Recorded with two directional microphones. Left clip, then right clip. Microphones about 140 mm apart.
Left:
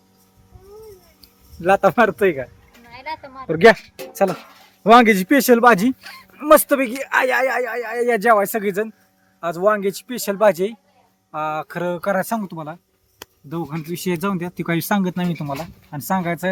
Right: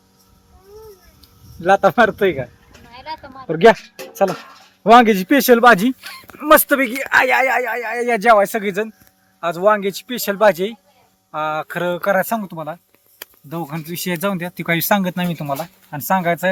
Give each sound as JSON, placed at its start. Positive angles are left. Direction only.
{"t": 1.2, "sound": "speech", "side_deg": -5}
{"t": 2.9, "sound": "a sound", "side_deg": 20}
{"t": 3.4, "sound": "speech", "side_deg": 0}
{"t": 4.8, "sound": "speech", "side_deg": 0}